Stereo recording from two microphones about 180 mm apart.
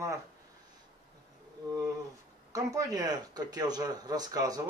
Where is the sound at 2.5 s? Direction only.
20° right (ahead or behind).